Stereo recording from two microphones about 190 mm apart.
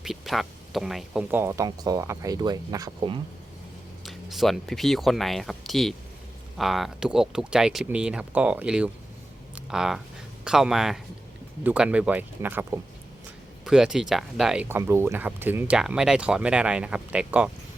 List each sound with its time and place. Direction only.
0.0 s speech: centre (ahead or behind); by 3.2 s 20° right (ahead or behind)
4.0 s speech: centre (ahead or behind)